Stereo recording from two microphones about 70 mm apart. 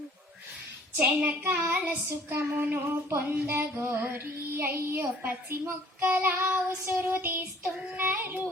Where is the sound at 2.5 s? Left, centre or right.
Right.